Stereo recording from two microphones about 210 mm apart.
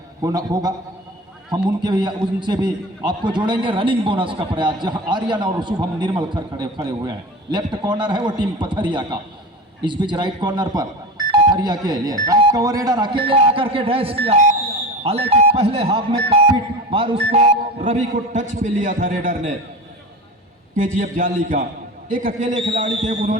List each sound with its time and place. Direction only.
0.2 s a man's voice: 15° right (ahead or behind)
1.8 s a man's voice: 20° right (ahead or behind); by 19.4 s 40° right (ahead or behind)
20.7 s a man's voice: 40° right (ahead or behind)